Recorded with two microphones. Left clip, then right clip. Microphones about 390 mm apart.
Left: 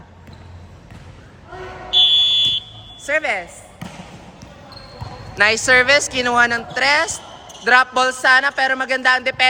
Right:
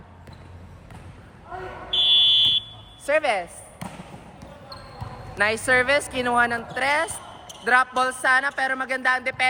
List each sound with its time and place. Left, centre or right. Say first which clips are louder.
2.0 s fire alarm: right 2 dB; centre
3.1 s speech: left 2 dB; centre
5.4 s speech: left 7 dB; centre